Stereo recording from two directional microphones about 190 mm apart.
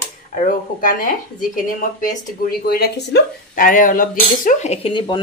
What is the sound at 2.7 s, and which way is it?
Speech, 55° left (ahead or behind).